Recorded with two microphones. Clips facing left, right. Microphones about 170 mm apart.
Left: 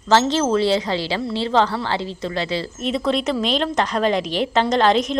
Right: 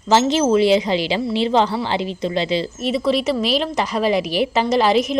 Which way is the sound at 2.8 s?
5° right (ahead or behind).